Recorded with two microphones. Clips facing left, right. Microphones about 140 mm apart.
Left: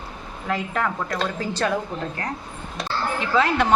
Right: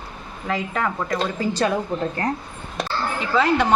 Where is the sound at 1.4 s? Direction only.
15° right (ahead or behind).